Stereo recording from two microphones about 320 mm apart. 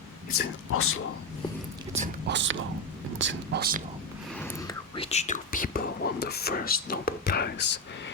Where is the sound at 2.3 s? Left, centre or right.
Right.